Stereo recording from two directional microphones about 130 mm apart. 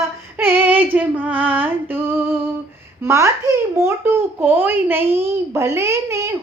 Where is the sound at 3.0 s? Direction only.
20° right (ahead or behind).